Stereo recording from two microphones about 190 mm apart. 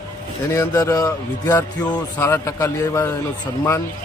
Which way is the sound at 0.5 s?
15° left (ahead or behind).